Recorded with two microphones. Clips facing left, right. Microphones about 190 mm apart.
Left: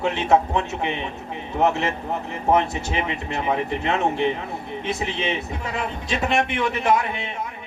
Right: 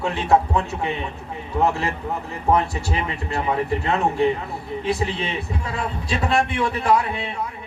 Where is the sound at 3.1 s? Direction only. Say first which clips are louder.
Even; 20° left (ahead or behind).